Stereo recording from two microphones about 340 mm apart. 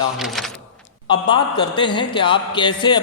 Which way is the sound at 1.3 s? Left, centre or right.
Centre.